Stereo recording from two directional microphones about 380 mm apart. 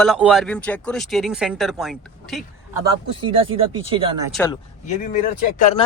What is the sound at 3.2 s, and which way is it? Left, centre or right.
Speech, centre.